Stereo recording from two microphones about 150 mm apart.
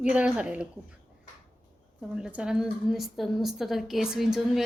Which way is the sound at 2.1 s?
5° right (ahead or behind).